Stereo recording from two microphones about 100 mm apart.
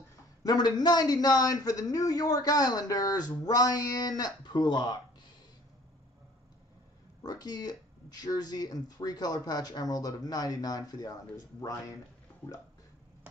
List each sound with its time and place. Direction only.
0.4 s a man's voice: 40° left (ahead or behind)
7.2 s a man's voice: 40° left (ahead or behind)